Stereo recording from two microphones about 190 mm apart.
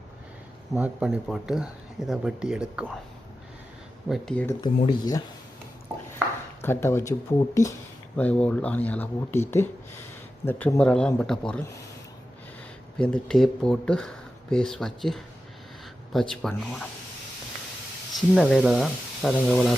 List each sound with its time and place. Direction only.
0.7 s speech: 5° right (ahead or behind)
4.1 s speech: 5° left (ahead or behind)
4.4 s speech: 20° left (ahead or behind)
6.6 s speech: 10° left (ahead or behind)
13.0 s speech: 5° left (ahead or behind)
18.3 s speech: centre (ahead or behind)